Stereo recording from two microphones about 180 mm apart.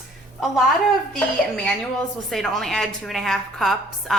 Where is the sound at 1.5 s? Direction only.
5° left (ahead or behind).